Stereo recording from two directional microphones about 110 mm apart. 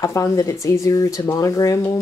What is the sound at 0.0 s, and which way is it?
Speech, 30° left (ahead or behind).